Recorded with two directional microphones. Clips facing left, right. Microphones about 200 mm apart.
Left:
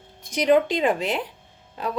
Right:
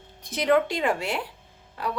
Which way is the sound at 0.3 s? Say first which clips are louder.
Left 3 dB; 15° left (ahead or behind).